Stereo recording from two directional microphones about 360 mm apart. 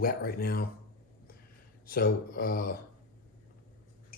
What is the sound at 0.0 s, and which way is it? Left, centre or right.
Speech, left.